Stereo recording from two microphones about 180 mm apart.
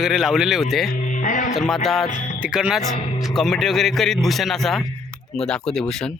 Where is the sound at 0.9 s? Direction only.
45° left (ahead or behind).